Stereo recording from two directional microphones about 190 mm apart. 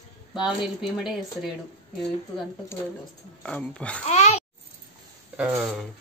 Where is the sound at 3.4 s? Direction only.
5° left (ahead or behind).